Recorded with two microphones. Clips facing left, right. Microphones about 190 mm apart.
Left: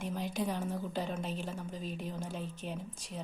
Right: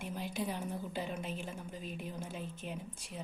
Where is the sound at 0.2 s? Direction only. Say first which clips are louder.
Left 2 dB; 40° left (ahead or behind).